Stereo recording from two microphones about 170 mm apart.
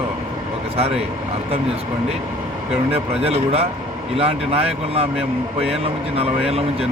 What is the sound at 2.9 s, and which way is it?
Speech, 35° right (ahead or behind).